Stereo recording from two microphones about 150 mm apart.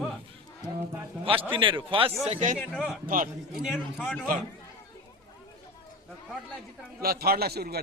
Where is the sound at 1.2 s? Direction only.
35° right (ahead or behind).